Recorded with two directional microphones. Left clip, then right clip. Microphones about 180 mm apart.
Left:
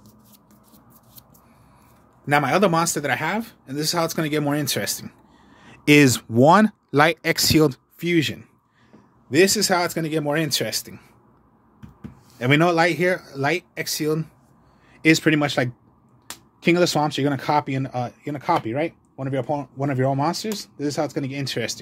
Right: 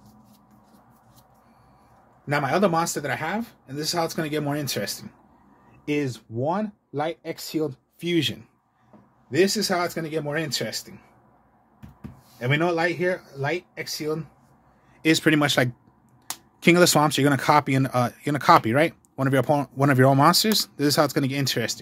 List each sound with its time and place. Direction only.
2.2 s speech: 45° left (ahead or behind)
8.0 s speech: 15° left (ahead or behind)
9.3 s speech: 60° left (ahead or behind)
12.4 s speech: 80° left
15.0 s speech: 20° left (ahead or behind)
15.2 s speech: 5° right (ahead or behind); by 21.5 s 25° right (ahead or behind)